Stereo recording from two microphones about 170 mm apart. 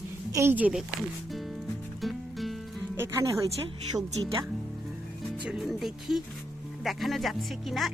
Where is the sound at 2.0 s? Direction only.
Centre (ahead or behind).